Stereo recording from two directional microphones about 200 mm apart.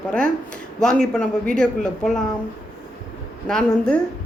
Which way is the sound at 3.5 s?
5° left (ahead or behind).